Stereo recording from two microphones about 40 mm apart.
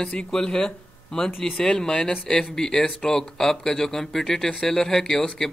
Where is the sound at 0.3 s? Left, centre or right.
Centre.